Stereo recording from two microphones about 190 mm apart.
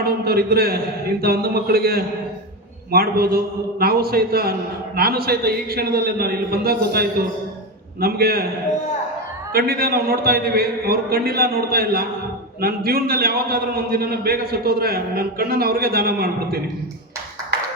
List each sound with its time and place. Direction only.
0.0 s a man's voice: 55° right (ahead or behind)
9.5 s a man's voice: 55° right (ahead or behind)